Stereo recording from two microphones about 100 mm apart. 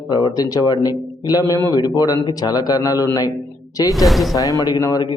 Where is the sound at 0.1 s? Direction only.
50° left (ahead or behind).